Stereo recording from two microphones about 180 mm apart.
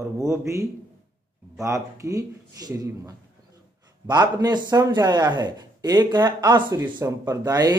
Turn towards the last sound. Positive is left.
turn(degrees=-20)  # may be behind; listen again after turning